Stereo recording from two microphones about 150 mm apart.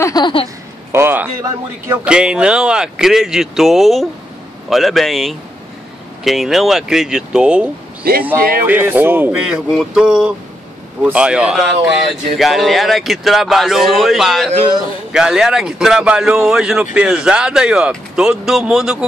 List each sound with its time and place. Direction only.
0.0 s speech: 30° left (ahead or behind)
0.9 s speech: 15° right (ahead or behind)
8.4 s speech: 80° right
8.6 s speech: 15° right (ahead or behind)